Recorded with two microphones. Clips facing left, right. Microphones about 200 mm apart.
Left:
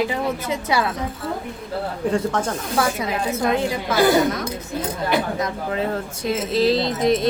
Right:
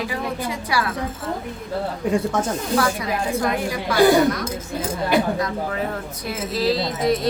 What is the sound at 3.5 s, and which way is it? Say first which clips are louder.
A woman's voice: left 2 dB; 25° left (ahead or behind).